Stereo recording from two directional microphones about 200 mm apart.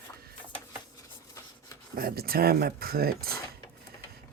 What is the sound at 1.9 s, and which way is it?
Speech, 50° right (ahead or behind).